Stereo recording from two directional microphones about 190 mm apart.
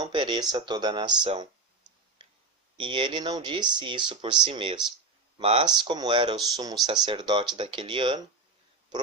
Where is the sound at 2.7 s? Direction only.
25° right (ahead or behind).